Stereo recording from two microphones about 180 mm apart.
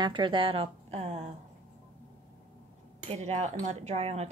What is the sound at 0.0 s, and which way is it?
Speech, 25° right (ahead or behind).